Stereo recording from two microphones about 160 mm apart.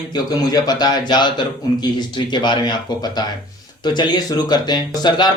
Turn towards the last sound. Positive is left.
turn(degrees=25)  # may be behind; listen again after turning